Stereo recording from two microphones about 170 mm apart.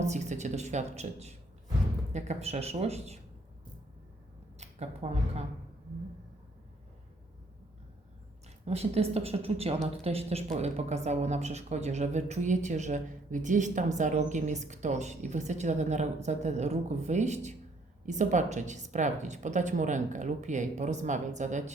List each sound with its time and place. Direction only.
0.0 s speech: 45° right (ahead or behind)
4.5 s speech: 40° right (ahead or behind)
8.6 s speech: 35° right (ahead or behind)